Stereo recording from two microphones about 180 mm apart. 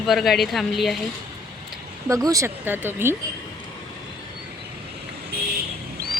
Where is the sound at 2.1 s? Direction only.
20° right (ahead or behind).